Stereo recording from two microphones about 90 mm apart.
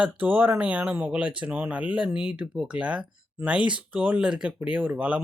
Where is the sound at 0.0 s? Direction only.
20° right (ahead or behind).